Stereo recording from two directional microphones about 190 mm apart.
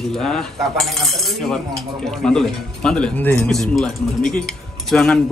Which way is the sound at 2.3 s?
5° left (ahead or behind).